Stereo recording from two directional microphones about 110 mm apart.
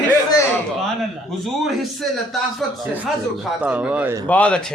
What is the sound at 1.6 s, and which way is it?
A man's voice, centre (ahead or behind).